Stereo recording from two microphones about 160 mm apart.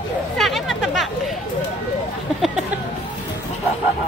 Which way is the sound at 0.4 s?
Centre (ahead or behind).